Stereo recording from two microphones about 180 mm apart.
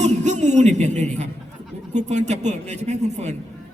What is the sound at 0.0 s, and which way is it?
Music, 40° right (ahead or behind).